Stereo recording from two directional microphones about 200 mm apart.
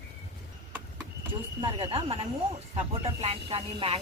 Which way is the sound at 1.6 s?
25° right (ahead or behind).